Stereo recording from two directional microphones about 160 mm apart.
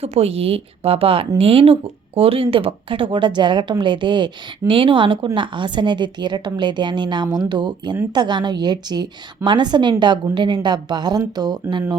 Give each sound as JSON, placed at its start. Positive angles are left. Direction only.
{"t": 0.0, "sound": "a woman's voice", "side_deg": -40}